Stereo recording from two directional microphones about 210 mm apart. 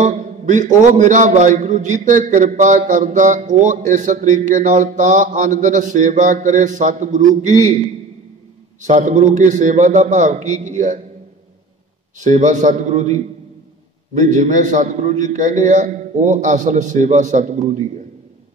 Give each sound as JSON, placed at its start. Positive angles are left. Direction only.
{"t": 0.0, "sound": "a man's voice", "side_deg": -35}
{"t": 12.2, "sound": "a man's voice", "side_deg": -35}